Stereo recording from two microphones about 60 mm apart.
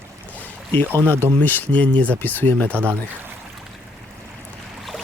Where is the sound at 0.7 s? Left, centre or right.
Left.